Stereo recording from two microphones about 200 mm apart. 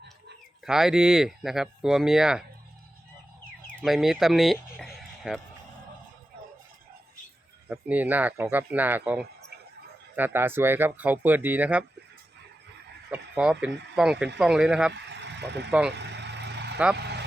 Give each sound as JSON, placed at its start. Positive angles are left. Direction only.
{"t": 0.6, "sound": "speech", "side_deg": 0}
{"t": 3.8, "sound": "speech", "side_deg": 0}
{"t": 4.8, "sound": "a sound", "side_deg": 0}
{"t": 7.7, "sound": "speech", "side_deg": -5}
{"t": 13.1, "sound": "speech", "side_deg": -5}
{"t": 14.9, "sound": "vehicle", "side_deg": -60}
{"t": 16.7, "sound": "speech", "side_deg": -5}